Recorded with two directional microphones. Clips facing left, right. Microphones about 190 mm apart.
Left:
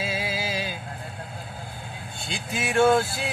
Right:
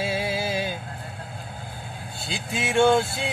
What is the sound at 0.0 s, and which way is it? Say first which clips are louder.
Music: right 3 dB; 60° right (ahead or behind).